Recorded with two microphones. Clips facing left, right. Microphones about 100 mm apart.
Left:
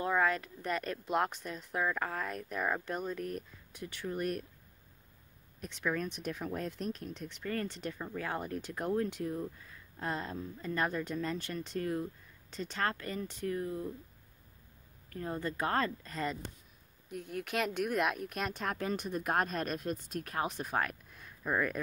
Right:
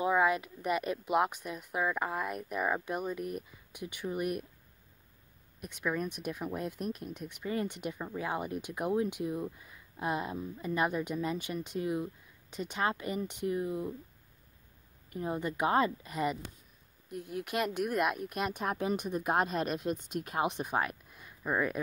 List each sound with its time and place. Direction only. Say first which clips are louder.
0.0 s speech: right 3 dB; 10° right (ahead or behind)
5.6 s speech: right 1 dB; 10° right (ahead or behind)
15.0 s speech: right 3 dB; 15° right (ahead or behind)